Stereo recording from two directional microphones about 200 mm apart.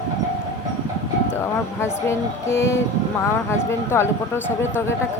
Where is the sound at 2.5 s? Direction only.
15° left (ahead or behind).